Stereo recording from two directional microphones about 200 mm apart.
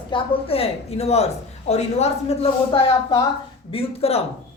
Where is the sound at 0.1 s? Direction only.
25° left (ahead or behind).